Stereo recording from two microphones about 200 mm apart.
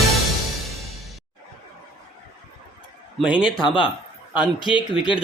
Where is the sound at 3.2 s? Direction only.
5° right (ahead or behind).